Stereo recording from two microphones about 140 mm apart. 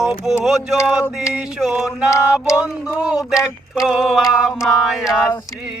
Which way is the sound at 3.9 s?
5° right (ahead or behind).